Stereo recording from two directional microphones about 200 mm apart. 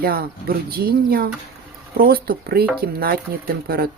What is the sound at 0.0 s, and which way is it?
Speech, 50° right (ahead or behind).